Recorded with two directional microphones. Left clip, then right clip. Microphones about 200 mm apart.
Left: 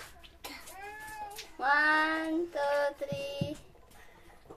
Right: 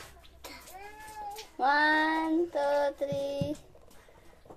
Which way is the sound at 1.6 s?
40° right (ahead or behind).